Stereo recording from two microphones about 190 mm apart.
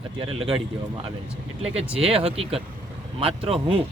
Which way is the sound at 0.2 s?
30° right (ahead or behind).